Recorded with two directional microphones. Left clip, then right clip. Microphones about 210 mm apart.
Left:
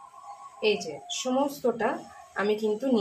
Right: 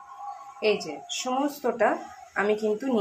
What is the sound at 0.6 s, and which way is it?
Speech, 15° right (ahead or behind).